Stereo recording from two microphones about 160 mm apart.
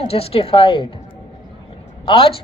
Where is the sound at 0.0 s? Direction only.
35° left (ahead or behind).